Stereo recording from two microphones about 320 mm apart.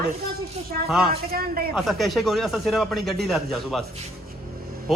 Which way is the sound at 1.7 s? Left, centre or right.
Centre.